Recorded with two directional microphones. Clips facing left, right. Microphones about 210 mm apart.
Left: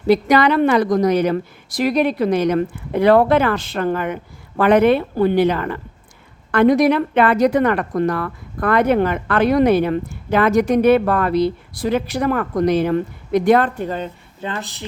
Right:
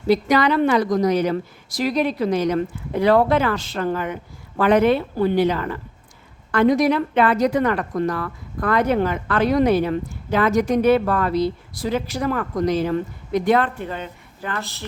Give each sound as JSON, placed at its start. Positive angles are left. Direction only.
{"t": 0.1, "sound": "a woman's voice", "side_deg": 60}
{"t": 13.6, "sound": "a woman's voice", "side_deg": 40}
{"t": 14.4, "sound": "speech", "side_deg": 20}